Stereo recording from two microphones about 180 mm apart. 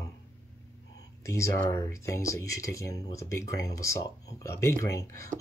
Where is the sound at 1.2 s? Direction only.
15° left (ahead or behind).